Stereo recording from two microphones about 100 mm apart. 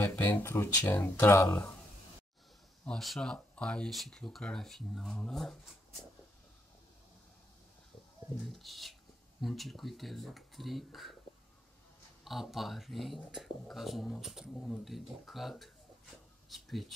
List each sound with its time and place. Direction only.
0.1 s speech: 25° left (ahead or behind)
2.8 s speech: 5° left (ahead or behind)
8.4 s speech: centre (ahead or behind)
12.3 s speech: centre (ahead or behind)